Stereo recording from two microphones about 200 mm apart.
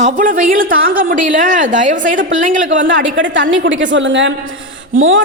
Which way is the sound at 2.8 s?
65° right (ahead or behind).